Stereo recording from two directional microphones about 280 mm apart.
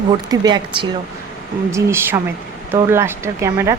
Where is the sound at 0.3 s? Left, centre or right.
Centre.